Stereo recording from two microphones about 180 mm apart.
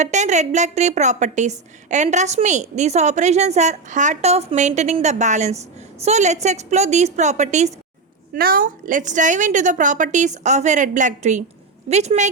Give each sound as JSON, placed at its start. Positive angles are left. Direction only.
{"t": 0.0, "sound": "a woman's voice", "side_deg": -40}
{"t": 8.3, "sound": "a woman's voice", "side_deg": -55}